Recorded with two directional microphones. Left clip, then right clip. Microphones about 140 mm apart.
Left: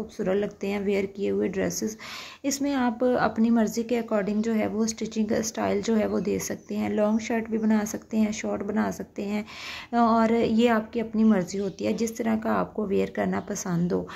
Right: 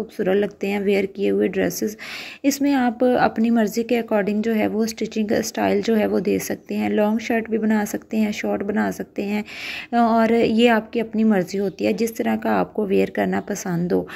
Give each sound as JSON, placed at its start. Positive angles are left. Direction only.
{"t": 0.2, "sound": "a woman's voice", "side_deg": -20}